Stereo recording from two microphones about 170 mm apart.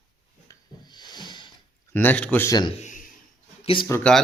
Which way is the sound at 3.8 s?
15° left (ahead or behind).